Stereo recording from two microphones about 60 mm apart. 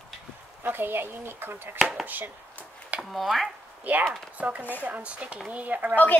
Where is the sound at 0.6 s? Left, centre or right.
Right.